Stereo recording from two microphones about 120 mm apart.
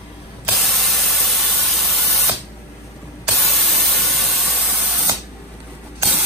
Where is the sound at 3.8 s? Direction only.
Centre (ahead or behind).